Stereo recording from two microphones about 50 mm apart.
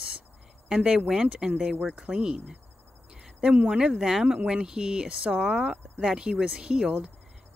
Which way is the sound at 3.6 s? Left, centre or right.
Centre.